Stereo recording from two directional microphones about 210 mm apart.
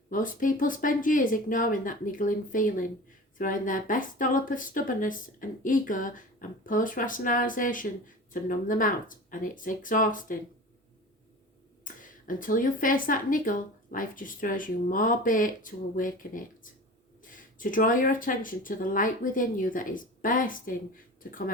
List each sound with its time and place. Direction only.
0.1 s speech: 40° left (ahead or behind)
11.9 s a sound: 40° left (ahead or behind)
12.2 s speech: 40° left (ahead or behind)